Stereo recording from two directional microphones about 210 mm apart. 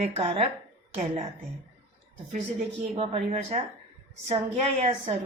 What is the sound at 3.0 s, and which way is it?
Speech, 25° right (ahead or behind).